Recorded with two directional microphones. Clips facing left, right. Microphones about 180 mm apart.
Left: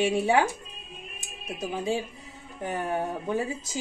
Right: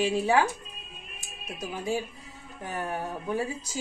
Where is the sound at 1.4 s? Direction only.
25° left (ahead or behind).